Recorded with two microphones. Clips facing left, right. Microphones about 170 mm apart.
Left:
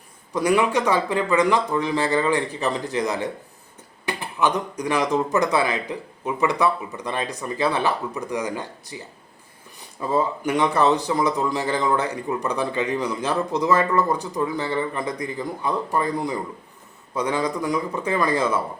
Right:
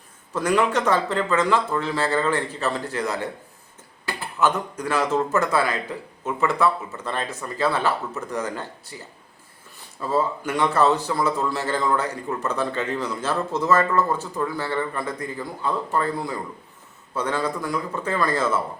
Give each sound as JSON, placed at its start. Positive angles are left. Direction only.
{"t": 0.3, "sound": "speech", "side_deg": 10}